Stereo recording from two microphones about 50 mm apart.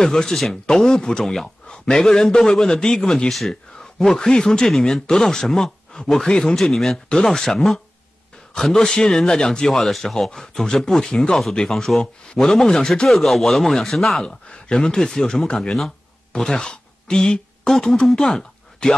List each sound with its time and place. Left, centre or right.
0.0 s speech: centre
14.2 s speech: centre